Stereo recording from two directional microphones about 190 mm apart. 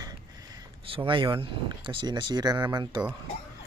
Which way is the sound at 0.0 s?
25° right (ahead or behind).